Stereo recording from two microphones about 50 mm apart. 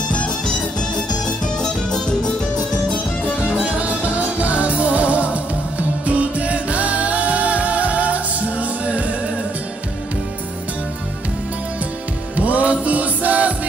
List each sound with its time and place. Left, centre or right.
0.7 s music: centre
3.3 s music: left
3.6 s music: right
12.4 s music: right